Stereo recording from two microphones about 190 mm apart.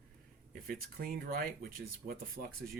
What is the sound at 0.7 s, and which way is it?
A man's voice, 50° right (ahead or behind).